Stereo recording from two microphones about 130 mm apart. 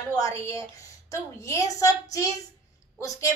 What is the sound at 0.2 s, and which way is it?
A woman's voice, 20° left (ahead or behind).